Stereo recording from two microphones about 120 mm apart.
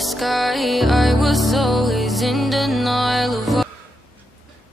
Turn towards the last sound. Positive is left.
turn(degrees=0)  # may be behind; listen again after turning